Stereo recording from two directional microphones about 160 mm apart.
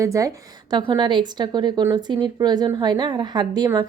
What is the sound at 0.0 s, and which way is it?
A woman's voice, 20° right (ahead or behind).